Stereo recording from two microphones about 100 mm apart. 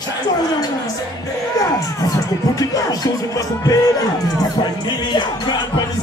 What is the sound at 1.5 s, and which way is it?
Speech, 35° left (ahead or behind).